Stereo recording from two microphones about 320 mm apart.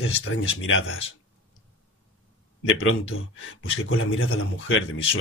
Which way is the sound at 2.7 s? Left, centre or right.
Left.